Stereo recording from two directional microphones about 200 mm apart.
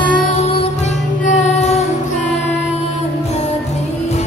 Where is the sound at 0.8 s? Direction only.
35° left (ahead or behind).